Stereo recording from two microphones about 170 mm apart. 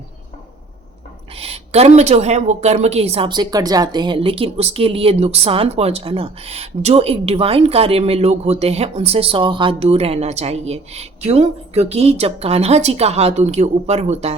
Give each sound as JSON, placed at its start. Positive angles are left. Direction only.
{"t": 1.4, "sound": "speech", "side_deg": -35}